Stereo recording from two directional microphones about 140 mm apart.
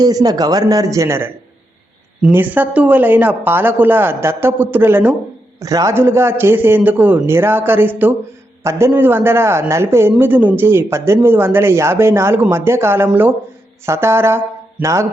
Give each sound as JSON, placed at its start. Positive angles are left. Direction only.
{"t": 0.0, "sound": "a man's voice", "side_deg": -25}